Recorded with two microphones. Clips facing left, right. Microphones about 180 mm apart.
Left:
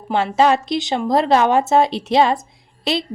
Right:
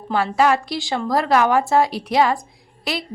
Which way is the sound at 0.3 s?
25° left (ahead or behind).